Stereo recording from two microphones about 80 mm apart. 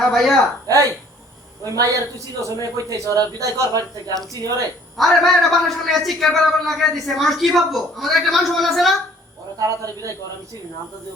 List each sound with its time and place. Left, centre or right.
0.0 s a man's voice: centre
1.6 s a man's voice: right
4.9 s a man's voice: centre
9.6 s a man's voice: right